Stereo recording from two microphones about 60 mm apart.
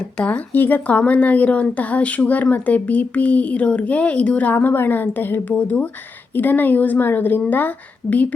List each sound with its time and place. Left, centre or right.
0.3 s speech: left
4.5 s a woman's voice: left